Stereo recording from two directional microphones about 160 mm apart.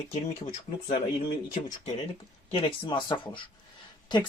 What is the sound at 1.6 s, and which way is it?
Speech, 45° left (ahead or behind).